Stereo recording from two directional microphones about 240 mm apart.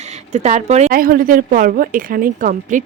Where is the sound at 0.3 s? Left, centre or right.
Right.